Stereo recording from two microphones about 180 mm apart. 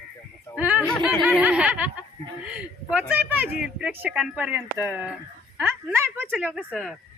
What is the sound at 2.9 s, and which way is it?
Speech, 10° right (ahead or behind).